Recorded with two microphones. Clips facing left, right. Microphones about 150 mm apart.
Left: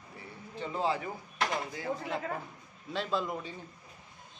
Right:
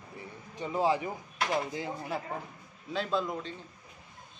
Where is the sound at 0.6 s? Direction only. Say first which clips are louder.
Right 4 dB; 15° right (ahead or behind).